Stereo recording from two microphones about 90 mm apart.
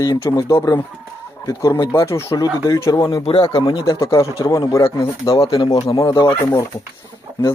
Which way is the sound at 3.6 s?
55° left (ahead or behind).